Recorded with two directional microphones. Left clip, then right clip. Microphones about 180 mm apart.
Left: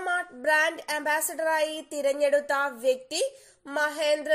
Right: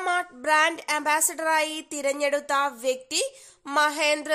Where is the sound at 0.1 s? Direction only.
20° right (ahead or behind).